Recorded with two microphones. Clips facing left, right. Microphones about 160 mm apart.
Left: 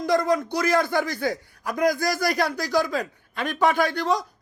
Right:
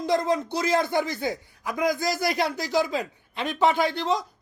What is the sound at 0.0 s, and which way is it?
A man's voice, 25° right (ahead or behind).